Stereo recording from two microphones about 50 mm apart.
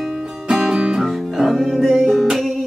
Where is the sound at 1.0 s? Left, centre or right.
Centre.